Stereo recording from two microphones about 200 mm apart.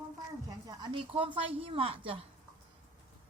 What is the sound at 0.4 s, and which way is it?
A woman's voice, 20° right (ahead or behind).